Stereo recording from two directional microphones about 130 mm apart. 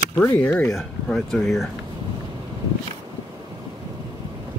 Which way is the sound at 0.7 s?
5° left (ahead or behind).